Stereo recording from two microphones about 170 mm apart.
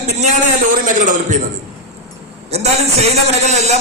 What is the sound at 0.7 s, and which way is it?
Speech, 50° right (ahead or behind).